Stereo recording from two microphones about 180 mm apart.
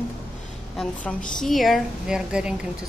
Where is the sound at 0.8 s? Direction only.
5° left (ahead or behind).